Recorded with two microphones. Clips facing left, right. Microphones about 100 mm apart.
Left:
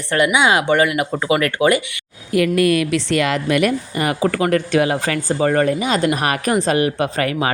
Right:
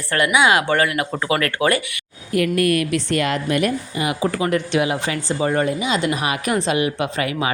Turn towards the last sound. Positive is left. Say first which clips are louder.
# left 3 dB
turn(degrees=45)  # may be behind; listen again after turning